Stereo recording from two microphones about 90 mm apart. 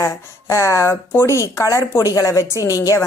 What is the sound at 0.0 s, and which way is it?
A woman's voice, 35° left (ahead or behind).